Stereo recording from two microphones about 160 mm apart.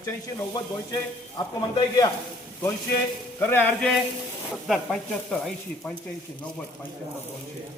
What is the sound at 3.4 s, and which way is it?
Speech, 10° left (ahead or behind).